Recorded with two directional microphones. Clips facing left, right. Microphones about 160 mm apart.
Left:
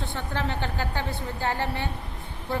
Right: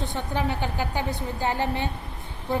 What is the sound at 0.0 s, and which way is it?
A woman's voice, 15° right (ahead or behind).